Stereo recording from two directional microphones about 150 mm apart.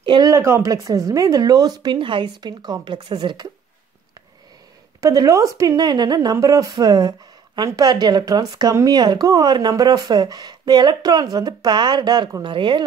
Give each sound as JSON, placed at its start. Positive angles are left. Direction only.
{"t": 0.0, "sound": "a woman's voice", "side_deg": -30}
{"t": 5.0, "sound": "a woman's voice", "side_deg": -20}